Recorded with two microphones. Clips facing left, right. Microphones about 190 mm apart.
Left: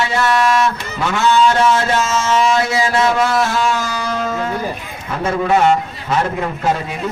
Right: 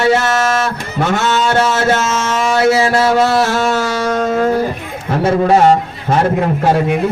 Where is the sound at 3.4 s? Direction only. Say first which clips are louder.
Right 3 dB; 45° right (ahead or behind).